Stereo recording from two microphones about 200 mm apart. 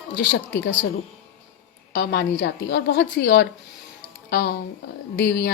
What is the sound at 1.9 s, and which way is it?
Speech, 45° left (ahead or behind).